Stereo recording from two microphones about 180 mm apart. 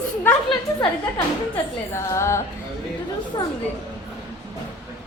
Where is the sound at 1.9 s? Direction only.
15° left (ahead or behind).